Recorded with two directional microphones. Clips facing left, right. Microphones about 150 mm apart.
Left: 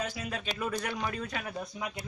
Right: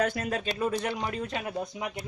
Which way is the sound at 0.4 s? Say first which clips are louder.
Right 3 dB; 25° right (ahead or behind).